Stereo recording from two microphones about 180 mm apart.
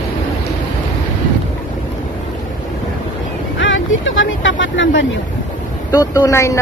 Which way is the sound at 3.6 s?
90° left.